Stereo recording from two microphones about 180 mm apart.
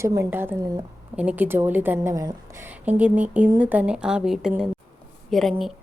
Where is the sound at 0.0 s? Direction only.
15° right (ahead or behind).